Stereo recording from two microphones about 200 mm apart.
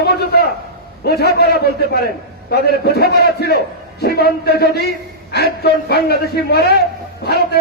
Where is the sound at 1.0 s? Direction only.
55° left (ahead or behind).